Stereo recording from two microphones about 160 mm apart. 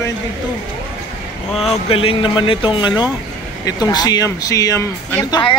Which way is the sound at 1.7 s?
35° left (ahead or behind).